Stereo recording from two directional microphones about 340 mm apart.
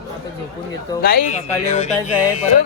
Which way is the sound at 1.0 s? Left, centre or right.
Left.